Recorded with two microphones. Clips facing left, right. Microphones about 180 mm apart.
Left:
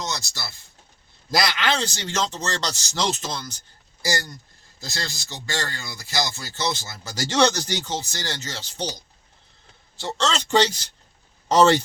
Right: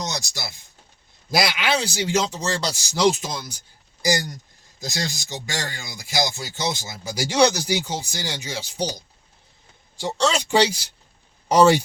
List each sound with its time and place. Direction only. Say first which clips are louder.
0.0 s speech: right 2 dB; 15° right (ahead or behind)
10.0 s speech: right 3 dB; 15° right (ahead or behind)